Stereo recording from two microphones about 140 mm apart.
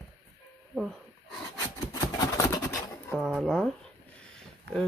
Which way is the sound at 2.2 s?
20° left (ahead or behind).